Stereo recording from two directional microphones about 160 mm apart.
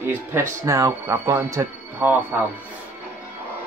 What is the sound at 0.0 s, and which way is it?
Speech, 15° right (ahead or behind).